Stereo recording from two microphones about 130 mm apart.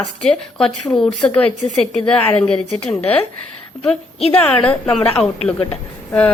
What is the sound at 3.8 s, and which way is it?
Speech, 5° left (ahead or behind).